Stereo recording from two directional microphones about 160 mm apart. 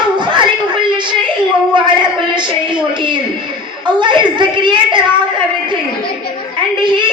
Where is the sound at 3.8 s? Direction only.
30° right (ahead or behind).